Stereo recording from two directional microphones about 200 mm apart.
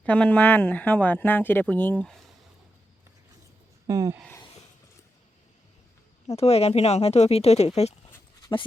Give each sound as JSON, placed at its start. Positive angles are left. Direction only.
{"t": 0.0, "sound": "speech", "side_deg": 5}
{"t": 3.8, "sound": "speech", "side_deg": -15}
{"t": 6.2, "sound": "speech", "side_deg": 30}
{"t": 8.4, "sound": "dog", "side_deg": 20}